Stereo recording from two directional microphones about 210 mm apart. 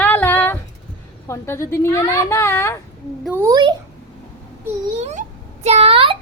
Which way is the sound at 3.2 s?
10° right (ahead or behind).